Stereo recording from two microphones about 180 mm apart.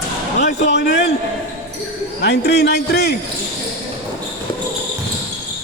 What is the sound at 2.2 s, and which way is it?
Speech, 65° left (ahead or behind).